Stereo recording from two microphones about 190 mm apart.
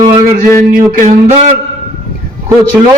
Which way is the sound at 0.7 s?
40° right (ahead or behind).